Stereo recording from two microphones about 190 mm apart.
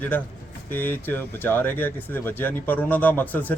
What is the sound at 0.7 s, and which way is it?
Speech, 10° left (ahead or behind).